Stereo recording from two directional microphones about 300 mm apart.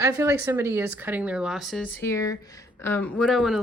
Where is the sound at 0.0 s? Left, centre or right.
Centre.